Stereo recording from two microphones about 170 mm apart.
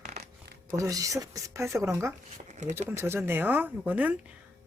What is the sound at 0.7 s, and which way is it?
Speech, 20° right (ahead or behind).